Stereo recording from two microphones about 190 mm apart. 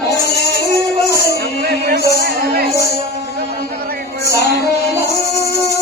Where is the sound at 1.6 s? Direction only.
55° right (ahead or behind).